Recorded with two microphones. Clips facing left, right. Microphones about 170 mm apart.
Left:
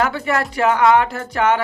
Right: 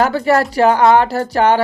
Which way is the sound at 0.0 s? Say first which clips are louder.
Right 6 dB; 40° right (ahead or behind).